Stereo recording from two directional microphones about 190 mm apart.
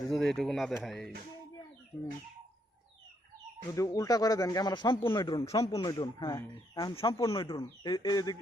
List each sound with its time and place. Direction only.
0.1 s speech: centre (ahead or behind)
3.8 s speech: 15° left (ahead or behind)